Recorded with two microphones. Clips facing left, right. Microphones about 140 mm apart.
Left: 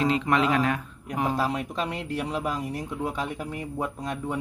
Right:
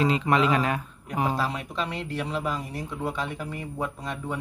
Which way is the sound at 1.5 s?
45° left (ahead or behind).